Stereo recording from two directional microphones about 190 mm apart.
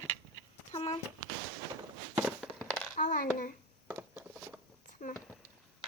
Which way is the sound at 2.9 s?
45° left (ahead or behind).